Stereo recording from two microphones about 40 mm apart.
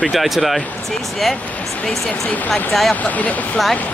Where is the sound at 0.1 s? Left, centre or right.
Centre.